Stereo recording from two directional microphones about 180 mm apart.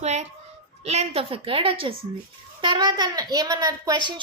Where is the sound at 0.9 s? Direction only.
35° right (ahead or behind).